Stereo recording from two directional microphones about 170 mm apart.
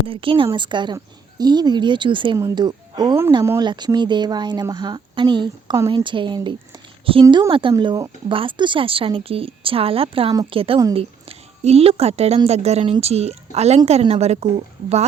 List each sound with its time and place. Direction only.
0.1 s a woman's voice: 30° right (ahead or behind)